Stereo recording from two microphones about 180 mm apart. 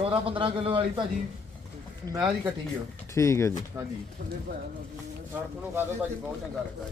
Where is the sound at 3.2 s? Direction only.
15° left (ahead or behind).